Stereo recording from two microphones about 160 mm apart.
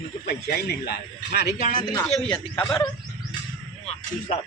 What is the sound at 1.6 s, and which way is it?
Speech, 55° left (ahead or behind).